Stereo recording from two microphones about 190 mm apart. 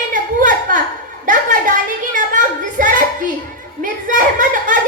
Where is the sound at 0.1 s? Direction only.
45° right (ahead or behind).